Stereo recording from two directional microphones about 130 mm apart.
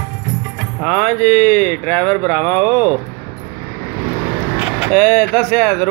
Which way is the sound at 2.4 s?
30° right (ahead or behind).